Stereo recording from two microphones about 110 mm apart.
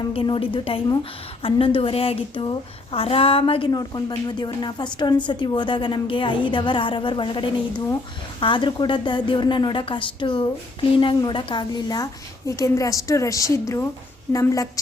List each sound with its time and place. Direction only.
0.1 s a woman's voice: 55° left (ahead or behind)
3.7 s speech: 35° left (ahead or behind)
12.5 s a woman's voice: 30° left (ahead or behind)